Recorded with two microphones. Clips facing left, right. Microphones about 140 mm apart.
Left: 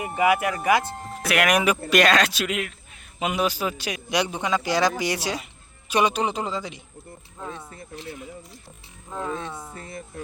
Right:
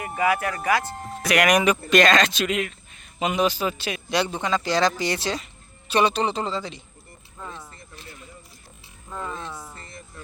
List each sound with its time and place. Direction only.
0.2 s speech: 15° left (ahead or behind)
0.9 s speech: centre (ahead or behind)
9.0 s speech: 5° left (ahead or behind)
9.5 s speech: 20° left (ahead or behind)